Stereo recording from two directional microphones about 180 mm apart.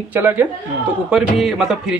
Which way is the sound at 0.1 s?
10° right (ahead or behind).